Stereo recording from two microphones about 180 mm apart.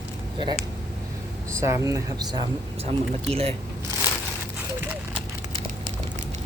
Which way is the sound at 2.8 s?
35° right (ahead or behind).